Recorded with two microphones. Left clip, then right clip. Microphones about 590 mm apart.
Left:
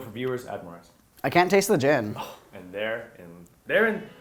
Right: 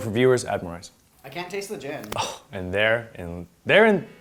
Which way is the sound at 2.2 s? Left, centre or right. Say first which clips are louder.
Right 9 dB; right.